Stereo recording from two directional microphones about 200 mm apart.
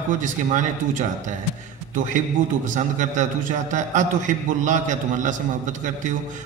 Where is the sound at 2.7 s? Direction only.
40° right (ahead or behind).